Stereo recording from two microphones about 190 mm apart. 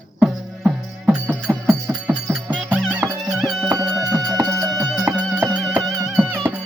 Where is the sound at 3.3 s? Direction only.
Centre (ahead or behind).